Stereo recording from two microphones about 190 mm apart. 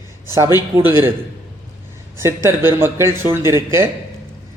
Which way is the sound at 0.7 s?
15° right (ahead or behind).